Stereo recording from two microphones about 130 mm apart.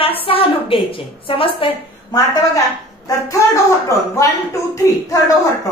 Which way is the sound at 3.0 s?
25° left (ahead or behind).